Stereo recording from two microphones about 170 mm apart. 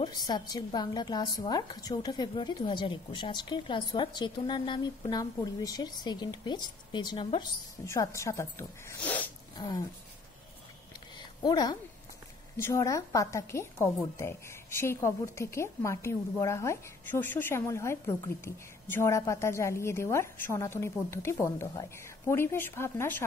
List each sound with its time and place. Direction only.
0.0 s a woman's voice: 25° left (ahead or behind)
7.8 s a woman's voice: 15° left (ahead or behind)
11.1 s a sound: 25° left (ahead or behind)
12.5 s a woman's voice: 15° left (ahead or behind)